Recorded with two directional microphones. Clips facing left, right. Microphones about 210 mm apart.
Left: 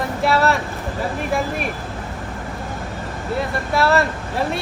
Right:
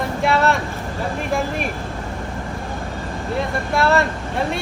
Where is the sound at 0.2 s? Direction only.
Centre (ahead or behind).